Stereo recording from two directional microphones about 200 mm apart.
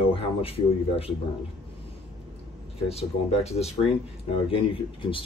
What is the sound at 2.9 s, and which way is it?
Speech, 30° left (ahead or behind).